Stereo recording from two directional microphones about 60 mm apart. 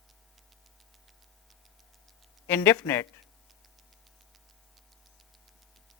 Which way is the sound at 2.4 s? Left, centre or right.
Left.